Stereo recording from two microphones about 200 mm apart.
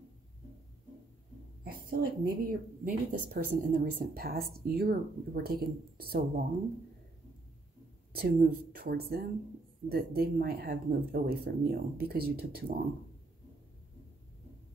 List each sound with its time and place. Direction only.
1.6 s speech: 45° right (ahead or behind)
8.1 s speech: 50° right (ahead or behind)